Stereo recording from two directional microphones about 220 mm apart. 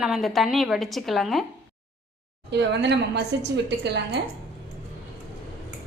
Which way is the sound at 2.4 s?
50° right (ahead or behind).